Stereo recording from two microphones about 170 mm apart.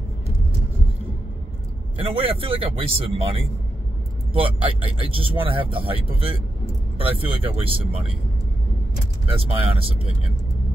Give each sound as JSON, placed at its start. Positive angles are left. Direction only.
{"t": 2.0, "sound": "speech", "side_deg": -35}
{"t": 9.3, "sound": "speech", "side_deg": -35}